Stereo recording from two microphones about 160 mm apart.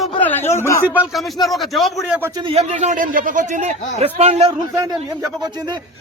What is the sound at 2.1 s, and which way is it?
Speech, 15° right (ahead or behind).